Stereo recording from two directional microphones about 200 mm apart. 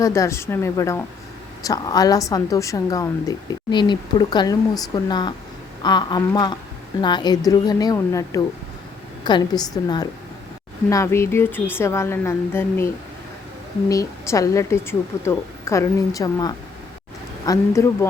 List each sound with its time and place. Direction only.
0.0 s a woman's voice: 15° left (ahead or behind)